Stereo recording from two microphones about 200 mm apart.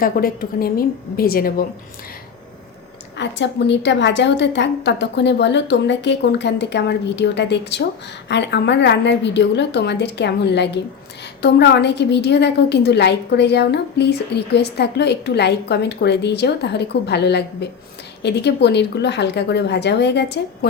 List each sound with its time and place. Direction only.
0.0 s a woman's voice: 50° left (ahead or behind)
3.2 s a woman's voice: 60° left (ahead or behind)